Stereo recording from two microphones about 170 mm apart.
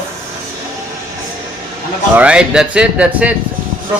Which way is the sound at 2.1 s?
10° right (ahead or behind).